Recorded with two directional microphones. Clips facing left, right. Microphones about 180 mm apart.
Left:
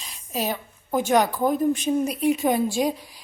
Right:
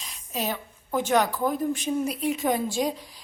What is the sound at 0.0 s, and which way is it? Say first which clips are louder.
A woman's voice: left 3 dB; 10° left (ahead or behind).